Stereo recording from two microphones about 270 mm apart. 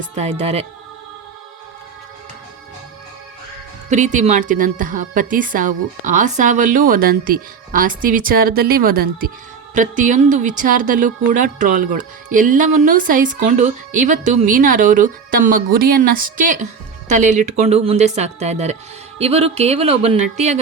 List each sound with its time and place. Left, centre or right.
0.2 s speech: right
3.8 s a woman's voice: right